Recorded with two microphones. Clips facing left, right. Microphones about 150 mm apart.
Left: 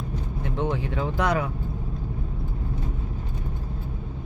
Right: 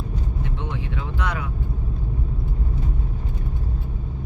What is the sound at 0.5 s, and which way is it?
Speech, 40° left (ahead or behind).